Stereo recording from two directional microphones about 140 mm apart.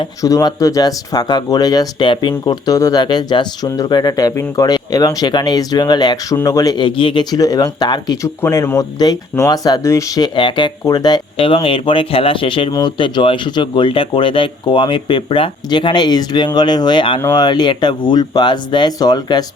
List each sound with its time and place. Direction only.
0.2 s speech: 25° left (ahead or behind)